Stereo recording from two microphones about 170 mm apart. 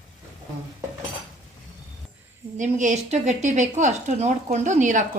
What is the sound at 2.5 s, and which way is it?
A woman's voice, 45° right (ahead or behind).